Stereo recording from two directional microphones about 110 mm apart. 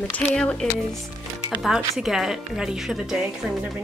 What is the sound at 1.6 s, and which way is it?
A woman's voice, 5° right (ahead or behind).